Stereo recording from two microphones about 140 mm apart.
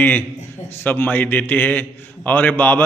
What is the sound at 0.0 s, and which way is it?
A man's voice, 15° left (ahead or behind).